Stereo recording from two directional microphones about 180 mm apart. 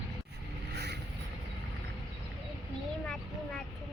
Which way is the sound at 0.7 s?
65° right (ahead or behind).